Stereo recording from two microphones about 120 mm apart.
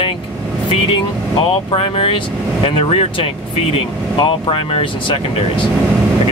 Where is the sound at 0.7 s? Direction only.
45° left (ahead or behind).